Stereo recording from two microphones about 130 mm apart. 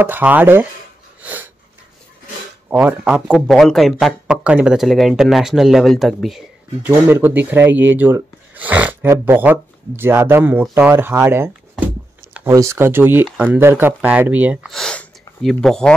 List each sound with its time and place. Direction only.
0.0 s speech: 15° right (ahead or behind)
1.2 s sneeze: 15° right (ahead or behind)
2.7 s speech: 10° right (ahead or behind)
6.9 s speech: 20° right (ahead or behind)
14.7 s a sound: 5° left (ahead or behind)